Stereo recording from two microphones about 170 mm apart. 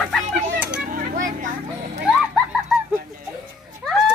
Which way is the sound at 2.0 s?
5° right (ahead or behind).